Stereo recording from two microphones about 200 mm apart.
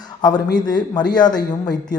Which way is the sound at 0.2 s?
20° left (ahead or behind).